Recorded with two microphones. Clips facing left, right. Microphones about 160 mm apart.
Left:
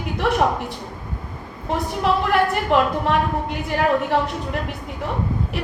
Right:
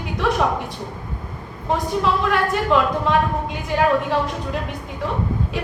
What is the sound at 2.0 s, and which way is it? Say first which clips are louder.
A woman's voice: left 5 dB; 75° left (ahead or behind).